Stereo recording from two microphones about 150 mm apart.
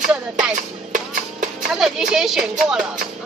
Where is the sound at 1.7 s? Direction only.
5° right (ahead or behind).